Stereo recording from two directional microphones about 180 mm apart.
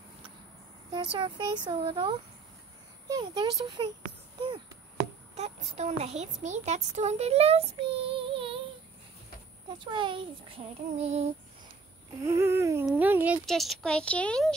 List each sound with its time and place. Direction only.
0.9 s child singing: 30° right (ahead or behind)
5.3 s a child's voice: 35° right (ahead or behind)
9.8 s child singing: 25° right (ahead or behind)
12.2 s babbling: 15° right (ahead or behind)
13.5 s speech: centre (ahead or behind)